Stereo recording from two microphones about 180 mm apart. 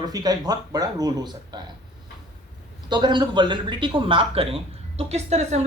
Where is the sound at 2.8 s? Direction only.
25° right (ahead or behind).